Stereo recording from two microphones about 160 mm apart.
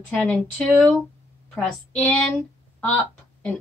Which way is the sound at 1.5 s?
10° left (ahead or behind).